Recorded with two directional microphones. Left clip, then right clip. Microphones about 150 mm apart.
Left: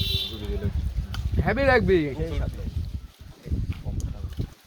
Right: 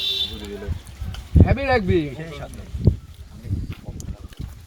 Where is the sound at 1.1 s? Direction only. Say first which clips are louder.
Right 4 dB; 20° left (ahead or behind).